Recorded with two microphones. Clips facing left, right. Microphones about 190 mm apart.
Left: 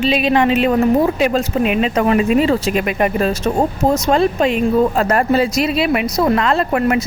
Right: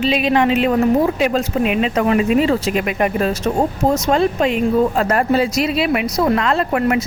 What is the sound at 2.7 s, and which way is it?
Speech, 35° left (ahead or behind).